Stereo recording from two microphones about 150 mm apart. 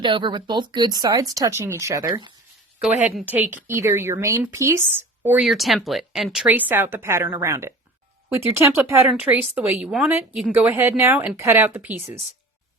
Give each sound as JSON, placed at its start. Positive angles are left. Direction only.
{"t": 0.0, "sound": "speech", "side_deg": -35}
{"t": 5.5, "sound": "speech", "side_deg": 0}